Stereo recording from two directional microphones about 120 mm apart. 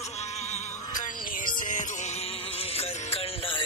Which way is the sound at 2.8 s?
55° left (ahead or behind).